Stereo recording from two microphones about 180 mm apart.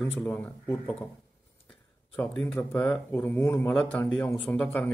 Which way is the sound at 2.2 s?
5° left (ahead or behind).